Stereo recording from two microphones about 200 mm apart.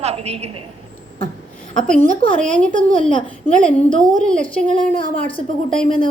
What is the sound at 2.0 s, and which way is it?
Speech, 40° right (ahead or behind).